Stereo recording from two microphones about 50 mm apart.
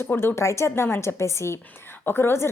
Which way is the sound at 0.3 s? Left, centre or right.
Left.